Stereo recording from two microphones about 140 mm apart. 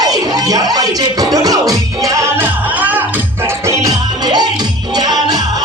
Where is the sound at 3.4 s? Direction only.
25° right (ahead or behind).